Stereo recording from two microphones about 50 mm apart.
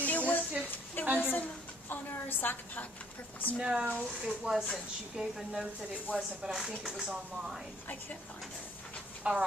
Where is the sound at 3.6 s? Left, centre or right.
Centre.